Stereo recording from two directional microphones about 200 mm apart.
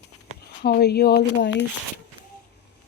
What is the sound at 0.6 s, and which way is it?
Speech, 55° left (ahead or behind).